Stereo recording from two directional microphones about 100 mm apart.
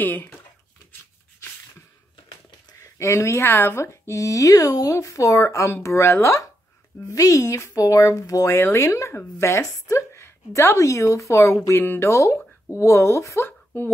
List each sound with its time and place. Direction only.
0.0 s speech: 20° left (ahead or behind)
2.8 s speech: 30° left (ahead or behind)